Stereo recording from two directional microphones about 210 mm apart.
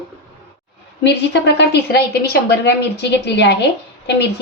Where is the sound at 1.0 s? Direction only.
55° left (ahead or behind).